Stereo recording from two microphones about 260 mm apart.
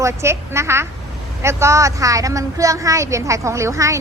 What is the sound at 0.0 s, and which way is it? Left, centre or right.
A woman's voice, centre.